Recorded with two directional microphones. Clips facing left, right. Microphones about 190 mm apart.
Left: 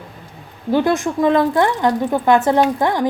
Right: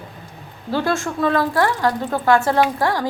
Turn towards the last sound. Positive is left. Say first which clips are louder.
# left 3 dB
turn(degrees=20)  # may be behind; listen again after turning